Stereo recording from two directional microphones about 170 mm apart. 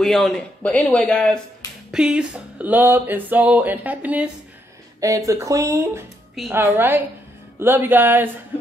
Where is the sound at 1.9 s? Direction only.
5° right (ahead or behind).